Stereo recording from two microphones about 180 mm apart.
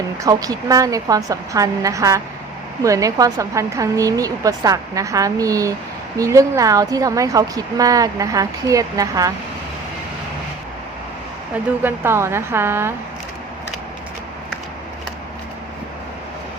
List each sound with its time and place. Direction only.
0.2 s a woman's voice: 20° right (ahead or behind)
11.8 s speech: 10° right (ahead or behind)